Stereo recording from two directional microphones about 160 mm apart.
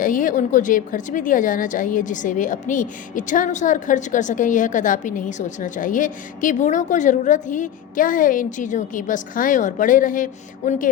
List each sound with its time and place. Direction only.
0.0 s speech: 55° left (ahead or behind)